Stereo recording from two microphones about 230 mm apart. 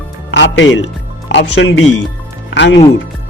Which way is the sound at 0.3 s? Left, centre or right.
Left.